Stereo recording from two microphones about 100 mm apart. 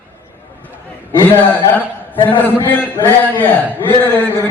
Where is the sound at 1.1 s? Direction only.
20° left (ahead or behind).